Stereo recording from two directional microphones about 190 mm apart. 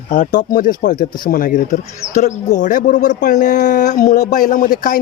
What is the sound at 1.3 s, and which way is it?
Speech, 45° left (ahead or behind).